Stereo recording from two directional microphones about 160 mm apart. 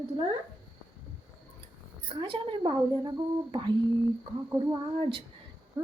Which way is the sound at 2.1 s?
30° right (ahead or behind).